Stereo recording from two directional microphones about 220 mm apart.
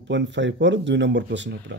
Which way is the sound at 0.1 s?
55° right (ahead or behind).